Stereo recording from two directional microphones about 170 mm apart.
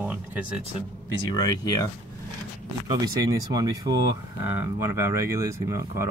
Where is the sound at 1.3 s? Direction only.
20° left (ahead or behind).